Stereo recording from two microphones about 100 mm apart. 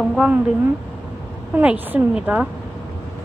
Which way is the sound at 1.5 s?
20° right (ahead or behind).